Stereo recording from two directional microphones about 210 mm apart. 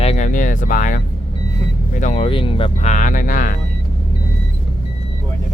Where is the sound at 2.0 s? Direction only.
35° left (ahead or behind).